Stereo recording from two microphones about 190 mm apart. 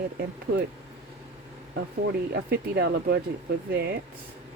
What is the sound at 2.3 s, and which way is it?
Speech, 60° right (ahead or behind).